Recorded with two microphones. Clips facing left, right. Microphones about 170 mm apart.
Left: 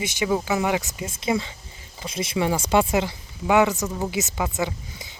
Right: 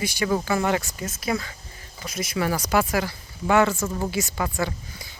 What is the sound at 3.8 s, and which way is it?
Speech, 5° left (ahead or behind).